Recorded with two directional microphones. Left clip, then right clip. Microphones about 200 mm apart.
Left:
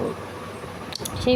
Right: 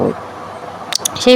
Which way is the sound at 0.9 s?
15° right (ahead or behind).